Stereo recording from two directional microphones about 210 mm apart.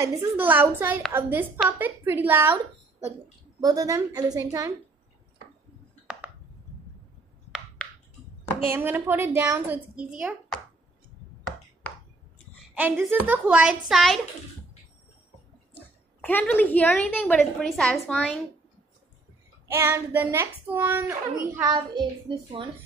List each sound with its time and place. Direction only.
0.0 s a woman's voice: 15° right (ahead or behind)
3.6 s a woman's voice: 15° right (ahead or behind)
8.6 s a woman's voice: 10° right (ahead or behind)
12.7 s a child's voice: 10° right (ahead or behind)
15.7 s a woman's voice: 10° left (ahead or behind)
19.7 s a woman's voice: 10° right (ahead or behind)